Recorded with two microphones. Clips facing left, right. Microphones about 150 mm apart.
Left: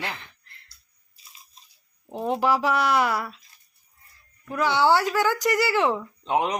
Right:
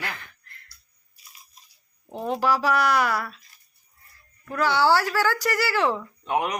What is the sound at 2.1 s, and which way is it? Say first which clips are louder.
A child's voice: left 1 dB; 20° left (ahead or behind).